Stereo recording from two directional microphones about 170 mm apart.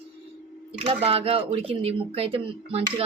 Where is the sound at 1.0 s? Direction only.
35° right (ahead or behind).